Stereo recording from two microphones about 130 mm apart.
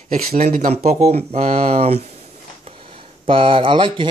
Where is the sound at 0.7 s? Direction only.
55° right (ahead or behind).